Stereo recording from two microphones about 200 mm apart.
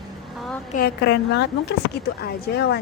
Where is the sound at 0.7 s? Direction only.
50° left (ahead or behind).